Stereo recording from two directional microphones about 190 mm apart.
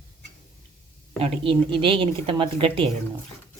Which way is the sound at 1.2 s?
30° right (ahead or behind).